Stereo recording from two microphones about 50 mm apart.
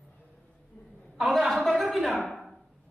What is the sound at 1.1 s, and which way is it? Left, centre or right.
A woman's voice, centre.